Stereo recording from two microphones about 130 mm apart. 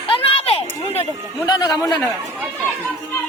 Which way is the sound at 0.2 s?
45° left (ahead or behind).